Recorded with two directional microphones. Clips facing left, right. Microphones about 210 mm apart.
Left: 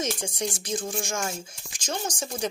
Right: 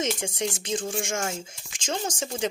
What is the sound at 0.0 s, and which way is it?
Speech, 25° right (ahead or behind).